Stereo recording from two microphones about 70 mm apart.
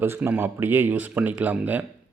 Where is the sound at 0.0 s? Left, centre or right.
Right.